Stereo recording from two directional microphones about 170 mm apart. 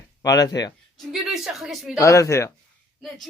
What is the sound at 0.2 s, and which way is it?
Speech, 20° left (ahead or behind).